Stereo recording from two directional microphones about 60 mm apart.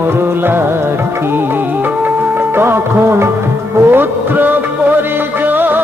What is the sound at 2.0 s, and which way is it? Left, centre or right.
Music of bollywood, right.